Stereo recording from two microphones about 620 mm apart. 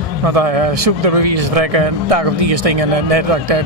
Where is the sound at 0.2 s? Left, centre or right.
Right.